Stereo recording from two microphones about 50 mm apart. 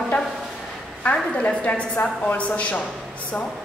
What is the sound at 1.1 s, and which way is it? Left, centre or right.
A woman's voice, left.